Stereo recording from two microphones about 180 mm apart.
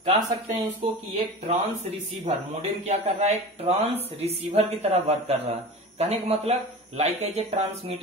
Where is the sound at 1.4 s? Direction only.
40° right (ahead or behind).